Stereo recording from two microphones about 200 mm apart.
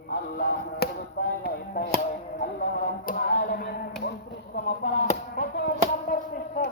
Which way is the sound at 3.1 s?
45° left (ahead or behind).